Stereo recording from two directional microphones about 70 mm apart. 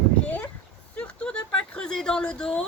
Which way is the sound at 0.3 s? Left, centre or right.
Left.